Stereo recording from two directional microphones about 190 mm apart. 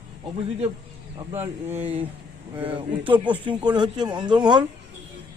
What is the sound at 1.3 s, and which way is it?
Speech, 10° right (ahead or behind).